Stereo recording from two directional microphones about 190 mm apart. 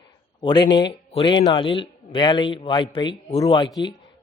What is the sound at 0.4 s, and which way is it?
Speech, 25° left (ahead or behind).